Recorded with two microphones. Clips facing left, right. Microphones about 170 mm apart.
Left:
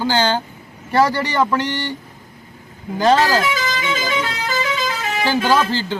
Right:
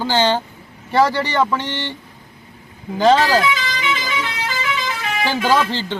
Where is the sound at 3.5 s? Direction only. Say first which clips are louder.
Left 2 dB; 45° left (ahead or behind).